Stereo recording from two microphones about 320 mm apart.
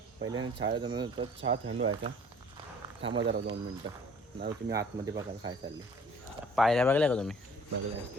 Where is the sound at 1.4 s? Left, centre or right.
Right.